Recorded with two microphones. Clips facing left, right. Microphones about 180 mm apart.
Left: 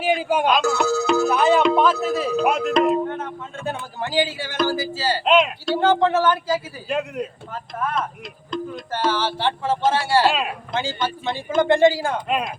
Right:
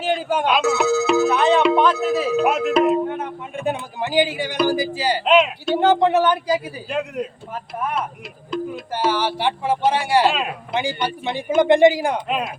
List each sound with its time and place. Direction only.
0.0 s speech: 10° left (ahead or behind)
0.4 s speech: 5° right (ahead or behind)
5.2 s speech: centre (ahead or behind)
5.7 s speech: 15° right (ahead or behind)
6.8 s speech: centre (ahead or behind)
7.8 s speech: 15° right (ahead or behind)
10.3 s speech: centre (ahead or behind)
10.8 s speech: 15° right (ahead or behind)